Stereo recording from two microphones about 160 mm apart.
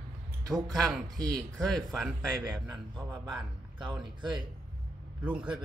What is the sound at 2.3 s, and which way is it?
Speech, 25° right (ahead or behind).